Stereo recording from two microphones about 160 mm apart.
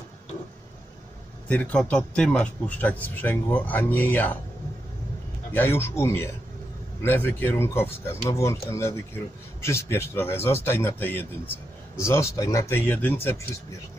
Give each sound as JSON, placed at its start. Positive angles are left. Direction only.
{"t": 1.5, "sound": "speech", "side_deg": 5}
{"t": 5.5, "sound": "speech", "side_deg": 15}